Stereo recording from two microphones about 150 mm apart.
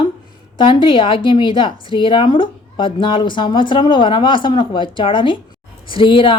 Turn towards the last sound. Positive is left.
turn(degrees=35)  # may be behind; listen again after turning